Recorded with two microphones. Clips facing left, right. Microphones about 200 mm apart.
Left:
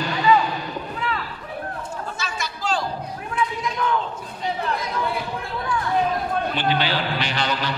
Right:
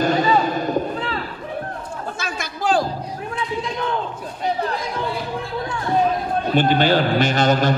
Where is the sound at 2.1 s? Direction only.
55° right (ahead or behind).